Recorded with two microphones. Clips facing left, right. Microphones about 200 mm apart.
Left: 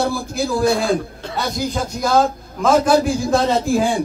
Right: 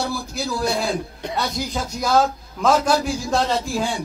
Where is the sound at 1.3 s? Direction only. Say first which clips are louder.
Left 3 dB; centre (ahead or behind).